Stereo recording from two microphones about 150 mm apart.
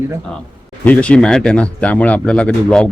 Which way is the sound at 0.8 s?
10° left (ahead or behind).